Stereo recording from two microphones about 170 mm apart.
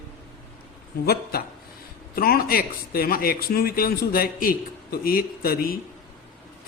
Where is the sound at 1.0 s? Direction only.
65° left (ahead or behind).